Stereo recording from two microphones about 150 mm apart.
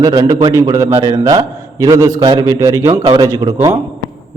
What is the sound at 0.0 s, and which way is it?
A man's voice, 25° right (ahead or behind).